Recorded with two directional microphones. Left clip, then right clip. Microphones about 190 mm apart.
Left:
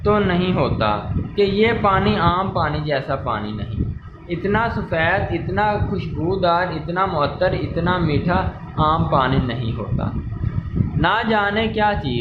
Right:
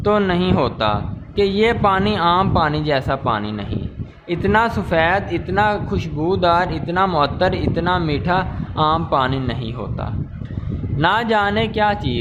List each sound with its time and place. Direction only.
0.0 s a man's voice: 40° right (ahead or behind)
11.0 s a man's voice: 35° right (ahead or behind)